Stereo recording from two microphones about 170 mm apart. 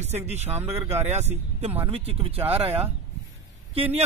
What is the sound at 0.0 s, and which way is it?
Speech, 40° right (ahead or behind).